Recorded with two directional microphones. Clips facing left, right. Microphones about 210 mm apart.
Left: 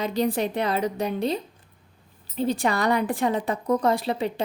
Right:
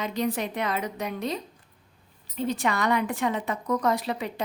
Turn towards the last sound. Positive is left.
turn(degrees=30)  # may be behind; listen again after turning